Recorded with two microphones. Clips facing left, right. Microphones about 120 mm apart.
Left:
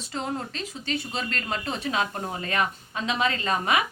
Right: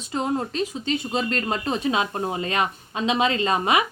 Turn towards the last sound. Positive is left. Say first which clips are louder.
# right 4 dB
turn(degrees=-20)  # may be behind; listen again after turning